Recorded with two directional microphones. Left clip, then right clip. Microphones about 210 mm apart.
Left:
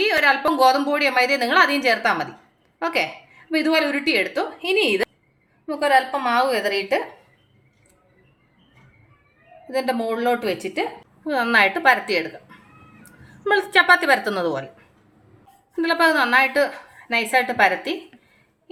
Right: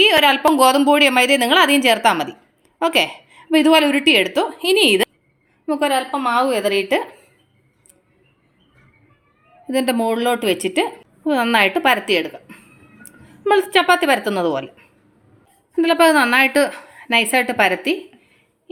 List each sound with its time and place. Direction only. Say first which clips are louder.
0.0 s a woman's voice: right 5 dB; 35° right (ahead or behind)
6.1 s a woman's voice: right 2 dB; 25° right (ahead or behind)
9.6 s a woman's voice: right 4 dB; 40° right (ahead or behind)
11.3 s a woman's voice: right 2 dB; 30° right (ahead or behind)